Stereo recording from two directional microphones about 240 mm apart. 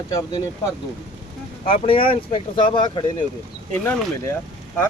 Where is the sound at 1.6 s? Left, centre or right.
Left.